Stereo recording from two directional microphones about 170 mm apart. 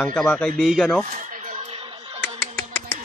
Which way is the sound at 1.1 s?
45° right (ahead or behind).